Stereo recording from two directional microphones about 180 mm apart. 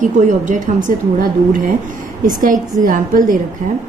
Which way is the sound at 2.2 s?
45° right (ahead or behind).